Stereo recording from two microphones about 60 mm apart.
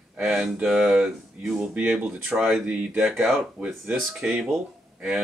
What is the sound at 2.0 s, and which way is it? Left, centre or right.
Speech, right.